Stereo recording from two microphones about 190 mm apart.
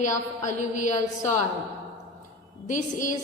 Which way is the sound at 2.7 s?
40° left (ahead or behind).